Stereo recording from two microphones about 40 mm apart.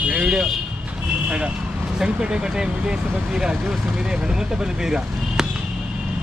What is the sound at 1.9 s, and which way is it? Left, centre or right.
Speech, centre.